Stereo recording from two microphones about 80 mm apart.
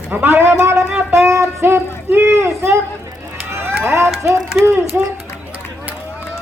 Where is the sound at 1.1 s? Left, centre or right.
Right.